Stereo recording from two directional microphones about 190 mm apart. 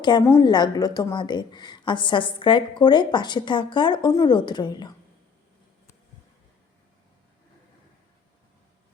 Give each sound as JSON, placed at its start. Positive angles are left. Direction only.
{"t": 0.0, "sound": "a woman's voice", "side_deg": 20}